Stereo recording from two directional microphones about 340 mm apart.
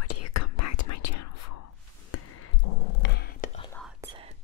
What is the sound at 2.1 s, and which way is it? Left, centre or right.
Music, left.